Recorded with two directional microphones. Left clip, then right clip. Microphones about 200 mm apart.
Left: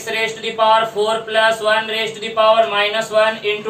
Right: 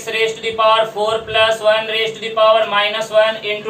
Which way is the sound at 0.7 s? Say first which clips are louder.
Even; 15° left (ahead or behind).